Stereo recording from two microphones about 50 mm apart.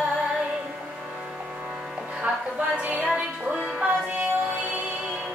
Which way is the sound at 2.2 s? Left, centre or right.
Right.